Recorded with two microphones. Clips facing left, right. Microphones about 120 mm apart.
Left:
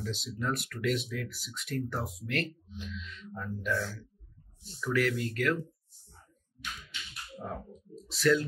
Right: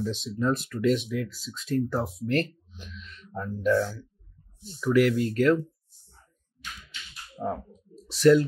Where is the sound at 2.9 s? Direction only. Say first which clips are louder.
Right 4 dB; 40° right (ahead or behind).